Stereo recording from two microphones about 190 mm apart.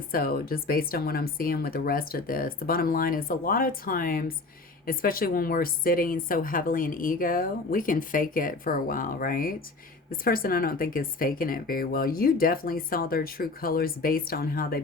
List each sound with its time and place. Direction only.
0.1 s a woman's voice: 50° left (ahead or behind)